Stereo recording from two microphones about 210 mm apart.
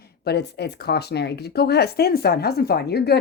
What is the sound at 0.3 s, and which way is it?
A woman's voice, 50° left (ahead or behind).